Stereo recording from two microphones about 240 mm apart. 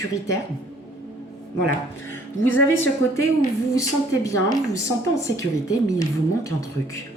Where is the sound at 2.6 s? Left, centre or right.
Left.